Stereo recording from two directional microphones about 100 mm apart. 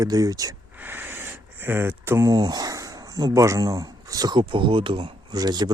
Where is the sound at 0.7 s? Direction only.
20° right (ahead or behind).